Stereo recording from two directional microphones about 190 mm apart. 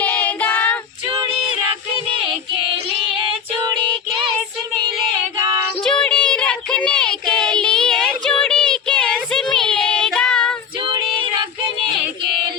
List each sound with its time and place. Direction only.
0.0 s child singing: 10° left (ahead or behind)
3.9 s music: 25° right (ahead or behind)
5.8 s child singing: 5° left (ahead or behind)
10.8 s music: 25° right (ahead or behind)